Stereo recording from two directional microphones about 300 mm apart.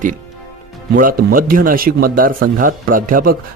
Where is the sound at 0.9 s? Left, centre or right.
Right.